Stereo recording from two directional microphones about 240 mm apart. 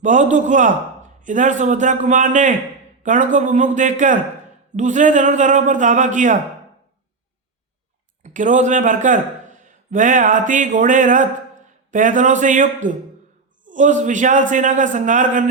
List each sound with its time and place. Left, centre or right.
0.0 s a man's voice: right
8.2 s a man's voice: right